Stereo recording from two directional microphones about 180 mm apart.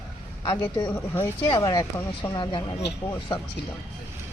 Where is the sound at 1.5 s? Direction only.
20° left (ahead or behind).